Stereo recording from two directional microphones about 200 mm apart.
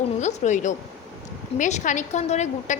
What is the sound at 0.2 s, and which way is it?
A woman's voice, 35° left (ahead or behind).